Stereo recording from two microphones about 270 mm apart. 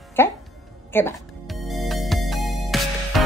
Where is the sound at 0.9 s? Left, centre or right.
Centre.